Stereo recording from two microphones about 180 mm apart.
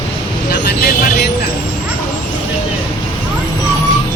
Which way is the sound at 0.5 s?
60° left (ahead or behind).